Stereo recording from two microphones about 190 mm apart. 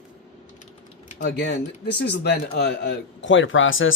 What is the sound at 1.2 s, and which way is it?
A man's voice, 65° left (ahead or behind).